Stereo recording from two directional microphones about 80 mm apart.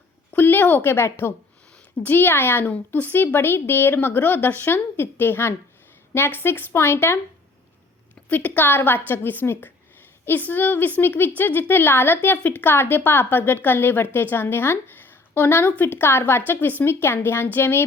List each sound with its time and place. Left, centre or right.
0.3 s a woman's voice: left
8.3 s a woman's voice: left